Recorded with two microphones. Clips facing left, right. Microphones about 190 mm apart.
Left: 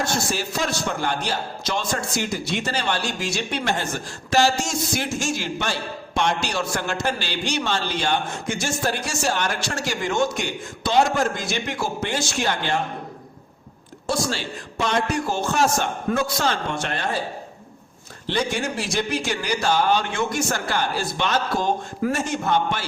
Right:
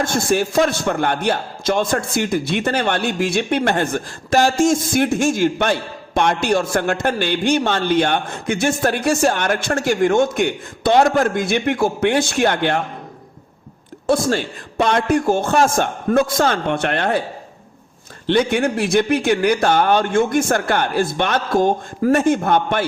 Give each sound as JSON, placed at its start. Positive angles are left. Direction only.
{"t": 0.0, "sound": "a man's voice", "side_deg": -50}
{"t": 14.1, "sound": "a man's voice", "side_deg": -55}
{"t": 18.3, "sound": "a man's voice", "side_deg": -60}